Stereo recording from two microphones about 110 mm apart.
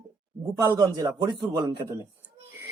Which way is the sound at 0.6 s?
25° right (ahead or behind).